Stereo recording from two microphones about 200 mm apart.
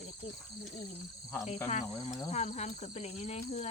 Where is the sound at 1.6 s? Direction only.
35° left (ahead or behind).